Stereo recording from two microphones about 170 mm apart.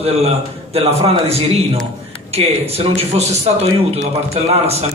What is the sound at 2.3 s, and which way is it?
A man's voice, 35° right (ahead or behind).